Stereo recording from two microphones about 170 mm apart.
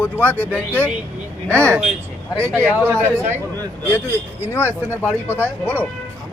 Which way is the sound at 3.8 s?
10° left (ahead or behind).